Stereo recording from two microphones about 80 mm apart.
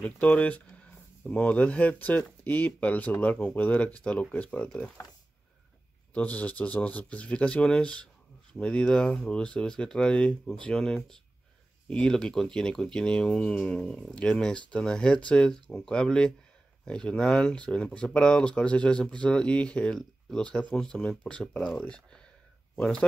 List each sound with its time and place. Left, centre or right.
0.0 s speech: centre
6.1 s speech: centre